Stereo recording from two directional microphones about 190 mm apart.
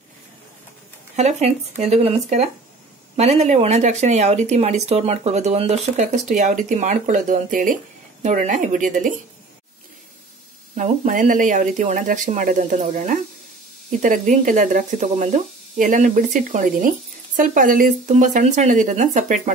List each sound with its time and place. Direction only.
1.1 s speech: 35° right (ahead or behind)
10.8 s speech: 45° right (ahead or behind)